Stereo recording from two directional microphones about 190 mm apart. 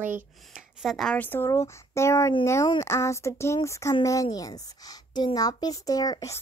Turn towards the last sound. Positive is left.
turn(degrees=20)  # may be behind; listen again after turning